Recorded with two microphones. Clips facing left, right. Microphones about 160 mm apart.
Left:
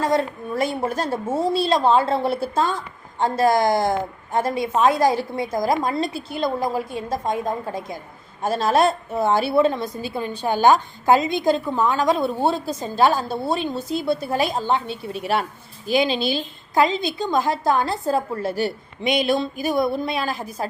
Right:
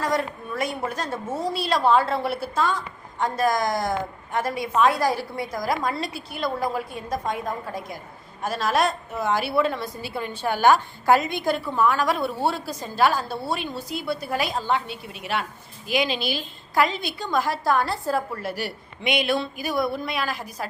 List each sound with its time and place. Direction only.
0.0 s a woman's voice: 25° left (ahead or behind)
19.0 s a woman's voice: 40° left (ahead or behind)
19.6 s a woman's voice: 25° left (ahead or behind)